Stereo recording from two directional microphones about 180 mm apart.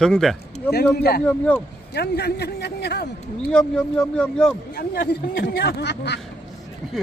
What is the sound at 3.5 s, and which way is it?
Speech, 5° left (ahead or behind).